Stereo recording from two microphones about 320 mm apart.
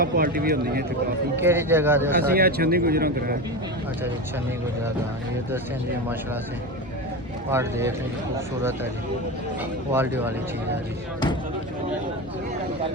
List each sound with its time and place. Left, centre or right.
0.0 s speech: right
1.4 s a man's voice: centre
2.3 s speech: right
7.5 s a man's voice: centre
9.9 s a man's voice: centre